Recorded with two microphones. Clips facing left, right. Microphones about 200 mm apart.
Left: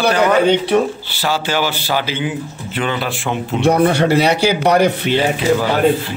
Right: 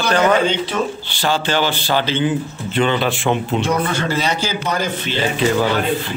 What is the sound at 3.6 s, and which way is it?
A man's voice, 65° left (ahead or behind).